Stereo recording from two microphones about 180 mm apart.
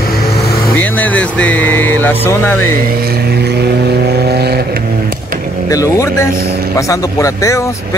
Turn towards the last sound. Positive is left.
turn(degrees=15)  # may be behind; listen again after turning